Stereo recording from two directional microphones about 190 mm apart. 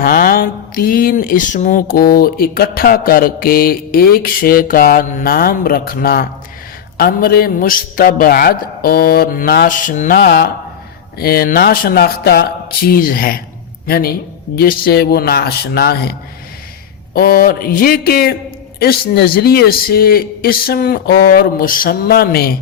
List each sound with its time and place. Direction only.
0.0 s mantra: 50° left (ahead or behind)
10.2 s speech: 55° left (ahead or behind)
11.2 s mantra: 55° left (ahead or behind)
13.8 s speech: 55° left (ahead or behind)
17.2 s mantra: 50° left (ahead or behind)